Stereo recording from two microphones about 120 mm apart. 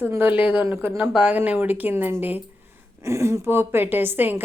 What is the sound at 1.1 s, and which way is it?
A woman's voice, 10° right (ahead or behind).